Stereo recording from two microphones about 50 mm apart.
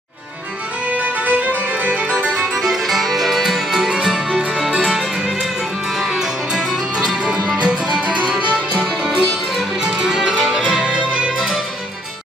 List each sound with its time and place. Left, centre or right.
0.8 s music: right
2.5 s music: centre
3.9 s music: centre
8.5 s music: centre
9.0 s music: centre